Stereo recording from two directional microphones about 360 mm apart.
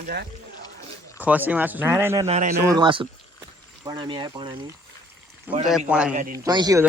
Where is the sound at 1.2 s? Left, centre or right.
Centre.